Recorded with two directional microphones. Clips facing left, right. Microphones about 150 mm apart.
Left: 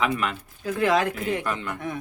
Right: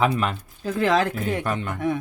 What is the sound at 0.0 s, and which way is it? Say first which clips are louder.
Speech: right 3 dB; 30° right (ahead or behind).